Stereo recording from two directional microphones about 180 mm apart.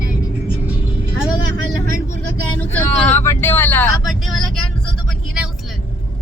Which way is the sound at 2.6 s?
10° left (ahead or behind).